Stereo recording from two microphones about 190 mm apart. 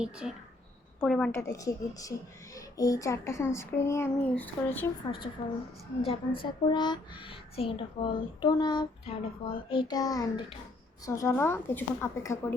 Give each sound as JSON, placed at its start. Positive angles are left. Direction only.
{"t": 0.0, "sound": "a woman's voice", "side_deg": -5}
{"t": 1.3, "sound": "speech", "side_deg": 15}
{"t": 6.0, "sound": "speech", "side_deg": 30}